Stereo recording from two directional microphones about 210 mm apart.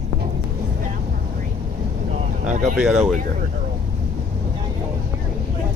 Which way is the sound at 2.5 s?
35° right (ahead or behind).